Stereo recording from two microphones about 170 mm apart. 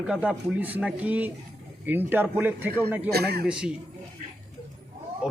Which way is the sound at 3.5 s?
5° right (ahead or behind).